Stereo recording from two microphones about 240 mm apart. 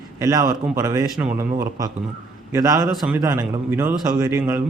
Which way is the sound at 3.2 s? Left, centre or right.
Centre.